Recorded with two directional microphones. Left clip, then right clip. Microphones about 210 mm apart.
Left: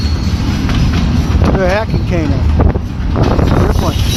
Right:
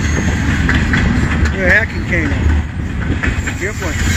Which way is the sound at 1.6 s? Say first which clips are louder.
Right 2 dB; 25° left (ahead or behind).